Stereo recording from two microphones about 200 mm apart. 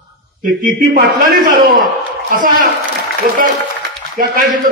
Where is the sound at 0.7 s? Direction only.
40° right (ahead or behind).